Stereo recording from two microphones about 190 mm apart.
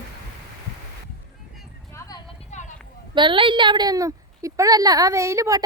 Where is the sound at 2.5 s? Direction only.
35° left (ahead or behind).